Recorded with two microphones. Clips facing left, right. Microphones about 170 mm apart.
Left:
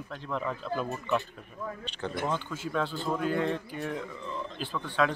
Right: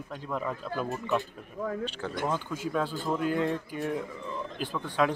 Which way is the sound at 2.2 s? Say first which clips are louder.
Right 4 dB; 5° right (ahead or behind).